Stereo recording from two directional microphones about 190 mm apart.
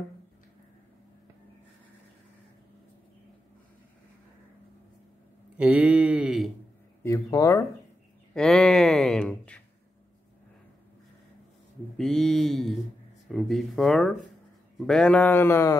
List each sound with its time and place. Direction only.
5.6 s a sound: 5° right (ahead or behind)
7.0 s speech: 15° left (ahead or behind)
8.4 s speech: centre (ahead or behind)
12.0 s speech: centre (ahead or behind)